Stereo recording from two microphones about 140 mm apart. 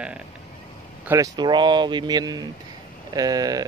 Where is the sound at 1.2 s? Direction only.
30° right (ahead or behind).